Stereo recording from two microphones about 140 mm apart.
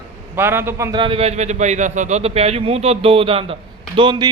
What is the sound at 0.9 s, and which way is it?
A man's voice, 35° right (ahead or behind).